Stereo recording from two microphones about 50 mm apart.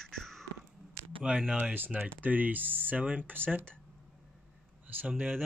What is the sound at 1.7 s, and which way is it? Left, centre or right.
Speech, right.